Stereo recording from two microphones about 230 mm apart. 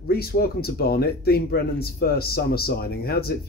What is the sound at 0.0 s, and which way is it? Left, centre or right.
Speech, left.